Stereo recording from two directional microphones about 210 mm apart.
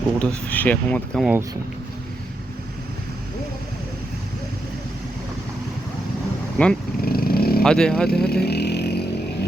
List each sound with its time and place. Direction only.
0.2 s speech: 5° left (ahead or behind)
6.6 s speech: 5° left (ahead or behind)
7.0 s dog: 45° left (ahead or behind)
7.6 s speech: 5° left (ahead or behind)
8.3 s vehicle: 50° left (ahead or behind)